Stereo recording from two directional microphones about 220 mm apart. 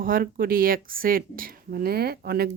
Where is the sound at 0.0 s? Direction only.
40° right (ahead or behind).